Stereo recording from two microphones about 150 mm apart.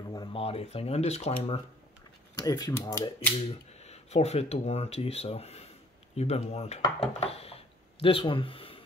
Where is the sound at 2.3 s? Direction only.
25° left (ahead or behind).